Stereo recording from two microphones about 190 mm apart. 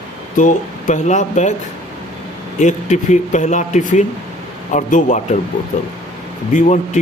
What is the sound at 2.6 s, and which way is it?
Speech, 40° left (ahead or behind).